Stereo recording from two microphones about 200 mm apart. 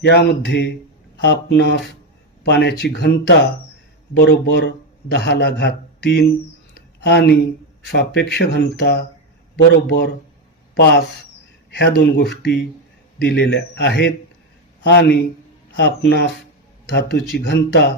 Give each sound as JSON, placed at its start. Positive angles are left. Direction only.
{"t": 0.0, "sound": "speech", "side_deg": 60}